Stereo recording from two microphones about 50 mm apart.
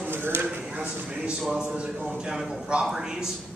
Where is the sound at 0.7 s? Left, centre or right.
Right.